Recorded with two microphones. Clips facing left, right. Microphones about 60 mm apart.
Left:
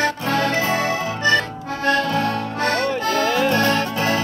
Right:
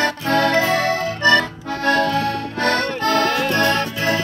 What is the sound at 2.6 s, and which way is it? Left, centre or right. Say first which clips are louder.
Music: right 2 dB; right.